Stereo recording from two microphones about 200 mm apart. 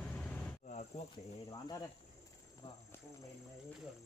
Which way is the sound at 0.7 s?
35° left (ahead or behind).